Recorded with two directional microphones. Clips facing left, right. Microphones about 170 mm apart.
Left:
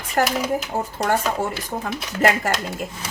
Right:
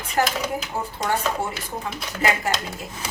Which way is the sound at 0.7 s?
40° left (ahead or behind).